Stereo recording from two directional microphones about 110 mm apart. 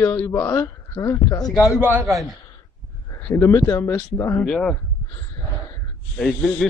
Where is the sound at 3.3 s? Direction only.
25° left (ahead or behind).